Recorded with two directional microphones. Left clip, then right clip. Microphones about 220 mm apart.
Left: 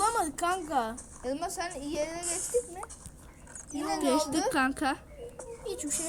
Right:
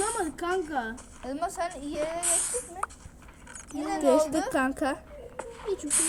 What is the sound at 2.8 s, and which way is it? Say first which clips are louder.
Speech: right 11 dB; 40° right (ahead or behind).